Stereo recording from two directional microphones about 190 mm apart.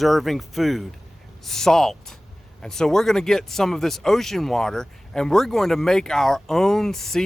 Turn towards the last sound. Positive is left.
turn(degrees=0)  # may be behind; listen again after turning